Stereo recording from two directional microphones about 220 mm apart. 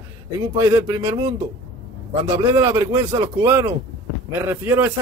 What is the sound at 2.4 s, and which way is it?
Speech, 10° right (ahead or behind).